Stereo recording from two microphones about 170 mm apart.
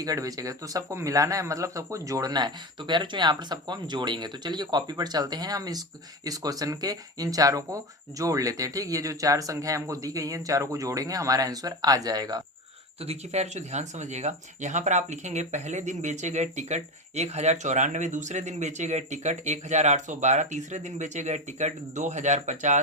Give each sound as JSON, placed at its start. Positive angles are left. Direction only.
{"t": 0.0, "sound": "speech", "side_deg": -20}
{"t": 13.0, "sound": "speech", "side_deg": -40}